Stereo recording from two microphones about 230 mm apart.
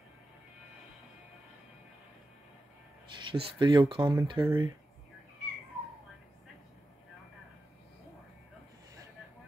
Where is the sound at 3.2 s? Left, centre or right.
Centre.